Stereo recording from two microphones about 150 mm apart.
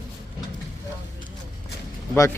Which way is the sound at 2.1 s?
15° left (ahead or behind).